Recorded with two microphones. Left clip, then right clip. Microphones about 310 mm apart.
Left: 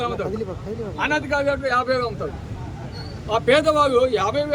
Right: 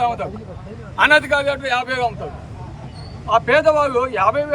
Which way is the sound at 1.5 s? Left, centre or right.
Centre.